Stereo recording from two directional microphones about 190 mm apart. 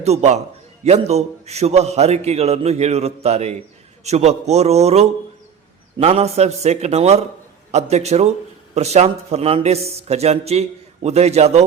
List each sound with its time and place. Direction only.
0.0 s a man's voice: 35° right (ahead or behind)